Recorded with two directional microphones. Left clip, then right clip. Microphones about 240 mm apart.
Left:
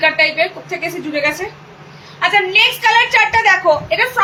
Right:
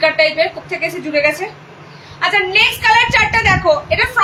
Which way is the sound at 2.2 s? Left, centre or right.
Centre.